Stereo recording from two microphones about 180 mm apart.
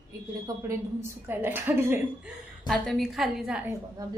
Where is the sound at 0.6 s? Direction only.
10° right (ahead or behind).